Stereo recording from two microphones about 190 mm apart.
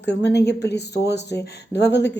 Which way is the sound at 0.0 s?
65° left (ahead or behind).